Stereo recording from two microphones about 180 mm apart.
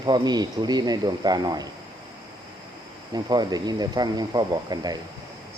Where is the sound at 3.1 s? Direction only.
20° right (ahead or behind).